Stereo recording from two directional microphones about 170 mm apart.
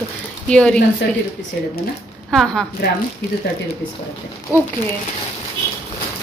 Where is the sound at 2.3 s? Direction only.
5° left (ahead or behind).